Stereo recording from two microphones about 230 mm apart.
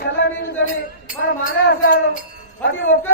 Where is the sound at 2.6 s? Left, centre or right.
Left.